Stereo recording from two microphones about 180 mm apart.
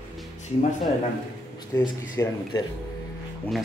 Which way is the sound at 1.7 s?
20° left (ahead or behind).